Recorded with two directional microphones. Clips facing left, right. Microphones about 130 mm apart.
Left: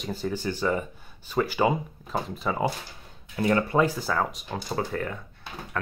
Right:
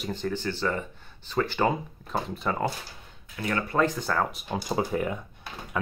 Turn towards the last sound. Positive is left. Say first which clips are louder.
# right 2 dB
turn(degrees=-15)  # may be behind; listen again after turning